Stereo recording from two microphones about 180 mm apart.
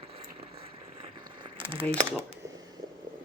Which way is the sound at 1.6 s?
30° right (ahead or behind).